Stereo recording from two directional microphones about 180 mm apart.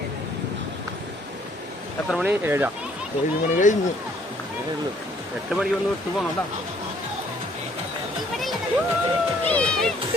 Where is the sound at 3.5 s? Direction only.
45° left (ahead or behind).